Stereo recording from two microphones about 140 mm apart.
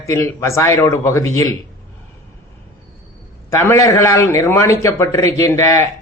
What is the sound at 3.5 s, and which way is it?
A man's voice, 20° left (ahead or behind).